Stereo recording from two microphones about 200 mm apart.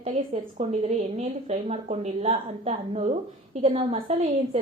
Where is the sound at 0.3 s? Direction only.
30° right (ahead or behind).